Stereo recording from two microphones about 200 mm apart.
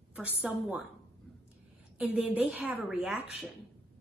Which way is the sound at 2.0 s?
5° right (ahead or behind).